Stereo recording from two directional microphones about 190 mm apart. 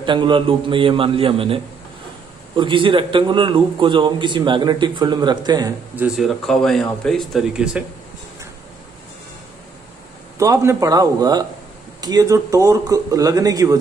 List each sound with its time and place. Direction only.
0.0 s a man's voice: 25° right (ahead or behind)
5.9 s speech: 5° right (ahead or behind)
10.3 s speech: 15° right (ahead or behind)